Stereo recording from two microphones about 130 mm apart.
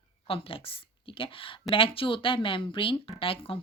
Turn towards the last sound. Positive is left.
turn(degrees=45)  # may be behind; listen again after turning